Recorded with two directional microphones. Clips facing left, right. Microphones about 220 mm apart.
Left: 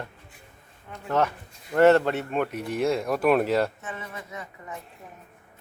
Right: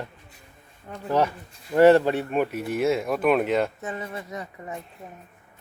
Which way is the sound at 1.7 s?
10° right (ahead or behind).